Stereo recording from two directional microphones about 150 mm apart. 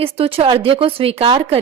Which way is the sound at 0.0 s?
40° right (ahead or behind).